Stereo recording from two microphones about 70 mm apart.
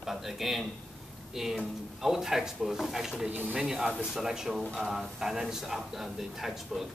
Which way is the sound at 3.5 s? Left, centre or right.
Centre.